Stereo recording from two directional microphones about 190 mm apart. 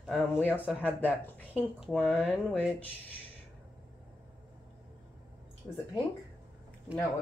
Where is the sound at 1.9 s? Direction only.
5° left (ahead or behind).